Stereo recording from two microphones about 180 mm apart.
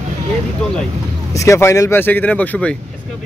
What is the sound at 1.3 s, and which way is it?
Speech, 15° left (ahead or behind).